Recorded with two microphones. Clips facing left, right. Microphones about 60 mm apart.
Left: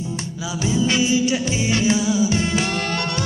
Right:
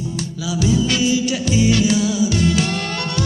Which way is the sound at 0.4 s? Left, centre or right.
Left.